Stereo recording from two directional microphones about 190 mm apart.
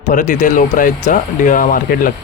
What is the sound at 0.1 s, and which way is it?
Speech, 45° left (ahead or behind).